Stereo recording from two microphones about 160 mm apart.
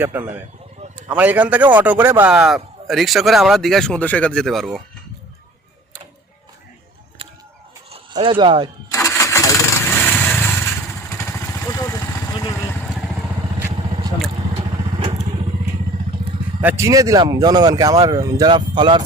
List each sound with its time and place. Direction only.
0.0 s speech: 15° right (ahead or behind)
7.9 s speech: 35° right (ahead or behind)
8.9 s engine starting: 20° left (ahead or behind)
9.8 s vehicle: 10° left (ahead or behind)
16.6 s speech: 15° right (ahead or behind)